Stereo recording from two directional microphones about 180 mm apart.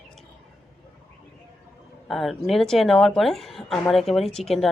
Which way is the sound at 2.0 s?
Centre (ahead or behind).